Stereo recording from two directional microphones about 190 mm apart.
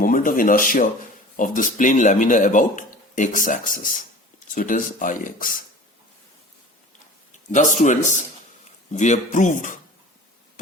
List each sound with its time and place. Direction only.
0.0 s speech: 45° left (ahead or behind)
7.5 s speech: 40° left (ahead or behind)